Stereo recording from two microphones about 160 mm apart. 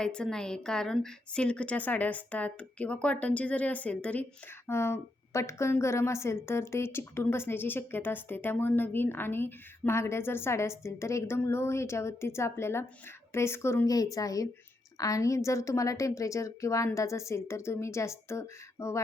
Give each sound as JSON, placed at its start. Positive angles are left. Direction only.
{"t": 0.0, "sound": "a woman's voice", "side_deg": 5}